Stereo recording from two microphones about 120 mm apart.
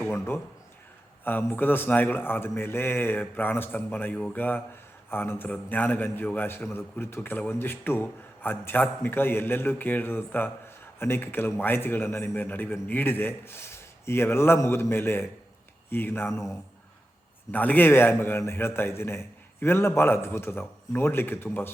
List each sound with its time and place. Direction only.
0.0 s a sound: 20° left (ahead or behind)
1.2 s a man's voice: 15° left (ahead or behind)
17.5 s a man's voice: 15° left (ahead or behind)